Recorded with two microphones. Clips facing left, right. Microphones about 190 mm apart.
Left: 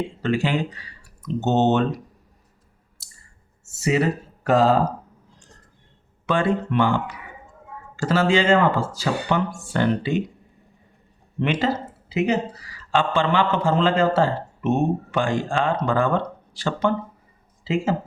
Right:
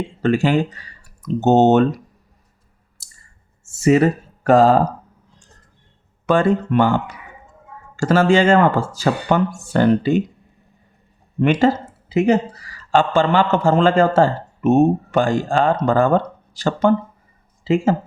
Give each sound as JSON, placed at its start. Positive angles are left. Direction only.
{"t": 0.2, "sound": "speech", "side_deg": -45}
{"t": 3.8, "sound": "speech", "side_deg": -50}
{"t": 6.2, "sound": "a man's voice", "side_deg": -45}
{"t": 7.9, "sound": "a man's voice", "side_deg": -45}
{"t": 11.6, "sound": "a man's voice", "side_deg": -50}